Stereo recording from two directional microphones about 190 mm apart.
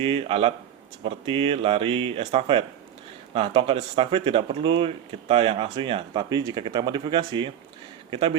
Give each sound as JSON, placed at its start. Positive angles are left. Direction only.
{"t": 0.0, "sound": "speech", "side_deg": -30}